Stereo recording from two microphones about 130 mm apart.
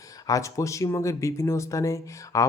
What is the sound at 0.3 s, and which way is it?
Speech, 25° left (ahead or behind).